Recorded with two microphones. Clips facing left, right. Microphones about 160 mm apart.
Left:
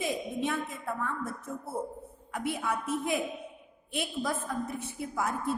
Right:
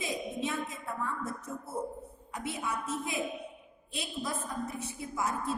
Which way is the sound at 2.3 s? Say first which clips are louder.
Left 4 dB; 55° left (ahead or behind).